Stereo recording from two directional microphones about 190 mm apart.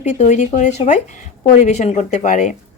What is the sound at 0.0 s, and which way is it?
Speech, 35° left (ahead or behind).